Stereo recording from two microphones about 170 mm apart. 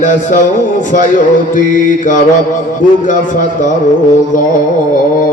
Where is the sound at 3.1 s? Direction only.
50° left (ahead or behind).